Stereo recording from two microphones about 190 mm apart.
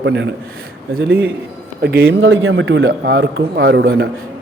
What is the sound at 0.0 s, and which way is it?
Speech, 65° right (ahead or behind).